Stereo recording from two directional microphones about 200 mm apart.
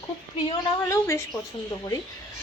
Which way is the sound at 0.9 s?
15° left (ahead or behind).